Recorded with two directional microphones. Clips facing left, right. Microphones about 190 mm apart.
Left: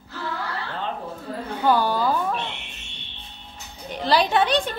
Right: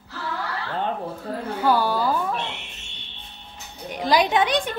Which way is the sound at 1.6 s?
10° right (ahead or behind).